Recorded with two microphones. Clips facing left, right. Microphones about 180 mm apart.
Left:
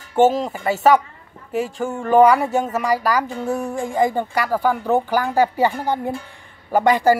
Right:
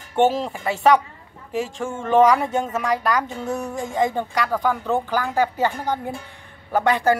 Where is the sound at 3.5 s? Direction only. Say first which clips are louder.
Left 3 dB; 25° left (ahead or behind).